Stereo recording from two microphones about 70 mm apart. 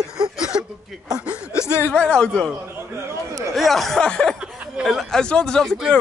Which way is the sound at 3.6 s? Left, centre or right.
Centre.